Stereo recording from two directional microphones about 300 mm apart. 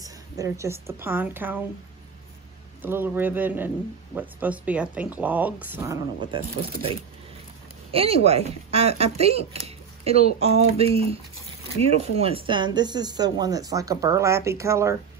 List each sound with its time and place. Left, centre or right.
0.0 s a woman's voice: centre
2.8 s speech: centre